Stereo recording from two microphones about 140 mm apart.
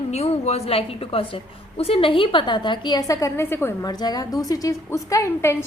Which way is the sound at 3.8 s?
30° left (ahead or behind).